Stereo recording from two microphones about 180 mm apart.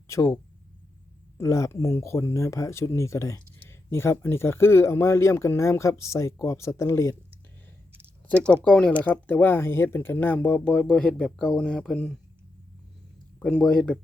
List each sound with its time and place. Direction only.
0.1 s speech: 15° left (ahead or behind)
1.4 s speech: 15° left (ahead or behind)
8.6 s speech: 5° left (ahead or behind)
13.4 s speech: 5° left (ahead or behind)